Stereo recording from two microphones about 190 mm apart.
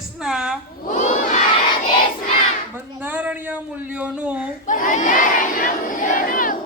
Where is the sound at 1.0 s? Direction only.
40° left (ahead or behind).